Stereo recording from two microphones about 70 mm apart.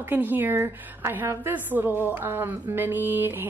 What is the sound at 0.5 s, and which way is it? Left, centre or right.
Speech, right.